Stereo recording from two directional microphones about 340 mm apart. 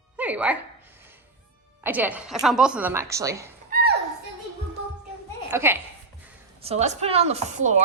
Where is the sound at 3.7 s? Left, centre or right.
Right.